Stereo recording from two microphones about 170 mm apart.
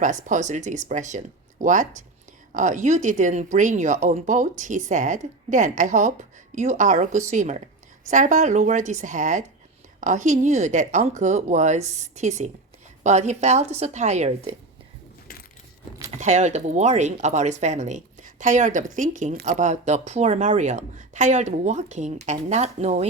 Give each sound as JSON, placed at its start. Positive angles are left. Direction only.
{"t": 0.0, "sound": "speech", "side_deg": -45}
{"t": 16.1, "sound": "speech", "side_deg": -45}